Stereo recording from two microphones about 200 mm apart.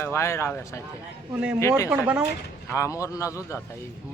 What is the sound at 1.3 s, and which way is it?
Speech, 10° right (ahead or behind).